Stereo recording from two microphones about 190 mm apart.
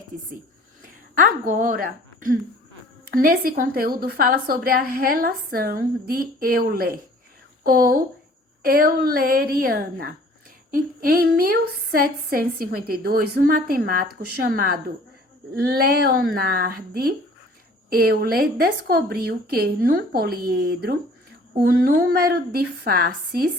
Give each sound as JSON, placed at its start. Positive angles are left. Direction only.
{"t": 0.8, "sound": "a woman's voice", "side_deg": -45}